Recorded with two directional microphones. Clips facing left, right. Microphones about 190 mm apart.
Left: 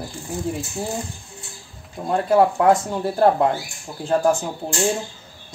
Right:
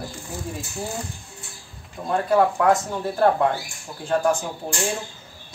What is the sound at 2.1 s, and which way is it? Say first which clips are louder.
Speech: left 2 dB; 25° left (ahead or behind).